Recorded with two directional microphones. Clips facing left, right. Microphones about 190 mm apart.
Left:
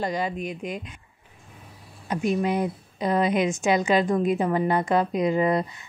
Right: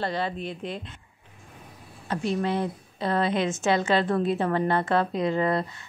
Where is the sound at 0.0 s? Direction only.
15° left (ahead or behind).